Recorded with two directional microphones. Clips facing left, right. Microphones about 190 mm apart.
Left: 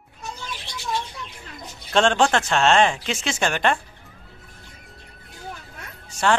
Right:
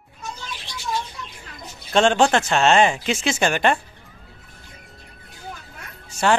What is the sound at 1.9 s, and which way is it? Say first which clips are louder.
Speech: right 2 dB; 5° right (ahead or behind).